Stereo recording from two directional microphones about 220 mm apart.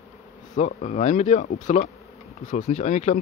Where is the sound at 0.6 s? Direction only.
35° left (ahead or behind).